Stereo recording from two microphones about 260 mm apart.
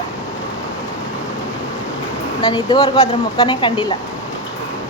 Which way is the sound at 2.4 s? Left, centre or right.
Centre.